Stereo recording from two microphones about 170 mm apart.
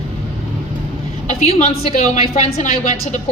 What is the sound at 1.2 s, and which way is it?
A woman's voice, 40° left (ahead or behind).